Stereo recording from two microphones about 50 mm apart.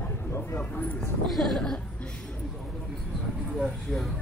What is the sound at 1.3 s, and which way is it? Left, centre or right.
Speech, centre.